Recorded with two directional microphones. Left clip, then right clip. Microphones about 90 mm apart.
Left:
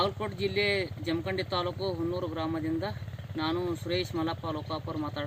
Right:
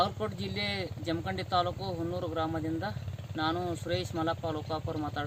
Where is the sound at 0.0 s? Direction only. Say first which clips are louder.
Left 1 dB; 20° right (ahead or behind).